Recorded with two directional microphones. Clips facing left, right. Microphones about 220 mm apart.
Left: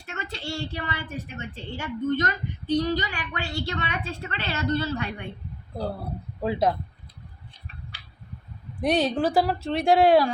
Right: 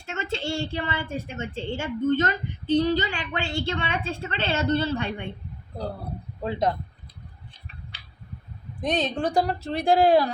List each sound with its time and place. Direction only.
0.0 s a woman's voice: 25° right (ahead or behind)
6.4 s speech: 10° left (ahead or behind)
8.8 s speech: 10° left (ahead or behind)